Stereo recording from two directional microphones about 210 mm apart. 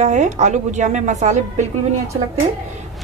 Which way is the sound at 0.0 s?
35° right (ahead or behind).